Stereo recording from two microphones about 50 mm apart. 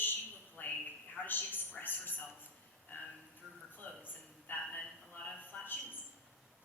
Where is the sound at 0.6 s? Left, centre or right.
Left.